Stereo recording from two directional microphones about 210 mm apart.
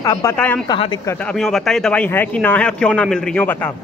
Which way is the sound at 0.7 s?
20° left (ahead or behind).